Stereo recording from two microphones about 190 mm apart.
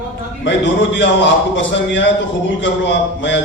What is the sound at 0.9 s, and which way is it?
A man's voice, 70° left (ahead or behind).